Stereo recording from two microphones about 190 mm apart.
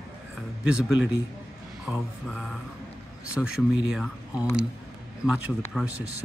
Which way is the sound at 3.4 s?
5° left (ahead or behind).